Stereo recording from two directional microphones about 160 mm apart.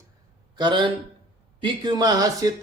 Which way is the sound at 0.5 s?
30° right (ahead or behind).